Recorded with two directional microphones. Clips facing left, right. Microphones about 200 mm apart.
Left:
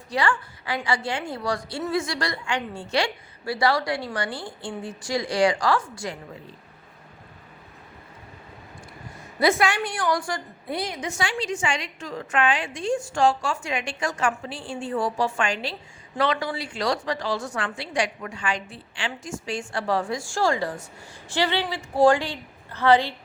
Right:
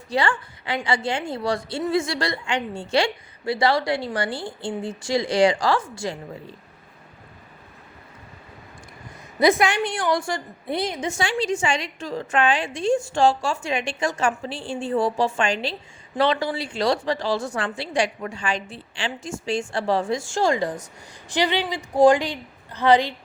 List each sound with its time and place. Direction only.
0.1 s a woman's voice: 25° right (ahead or behind)
9.4 s a woman's voice: 20° right (ahead or behind)